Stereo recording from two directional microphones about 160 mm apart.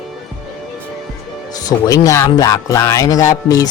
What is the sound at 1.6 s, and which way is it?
Speech, 25° left (ahead or behind).